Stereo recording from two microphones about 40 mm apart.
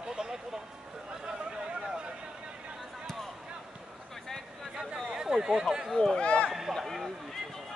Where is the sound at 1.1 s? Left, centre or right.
Right.